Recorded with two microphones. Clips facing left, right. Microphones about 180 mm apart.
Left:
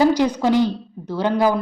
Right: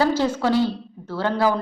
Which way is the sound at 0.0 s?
15° left (ahead or behind).